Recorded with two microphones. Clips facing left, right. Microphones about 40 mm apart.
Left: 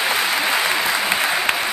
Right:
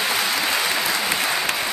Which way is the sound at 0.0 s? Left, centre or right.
Centre.